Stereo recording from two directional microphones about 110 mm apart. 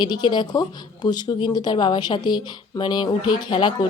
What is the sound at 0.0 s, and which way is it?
Speech, 45° left (ahead or behind).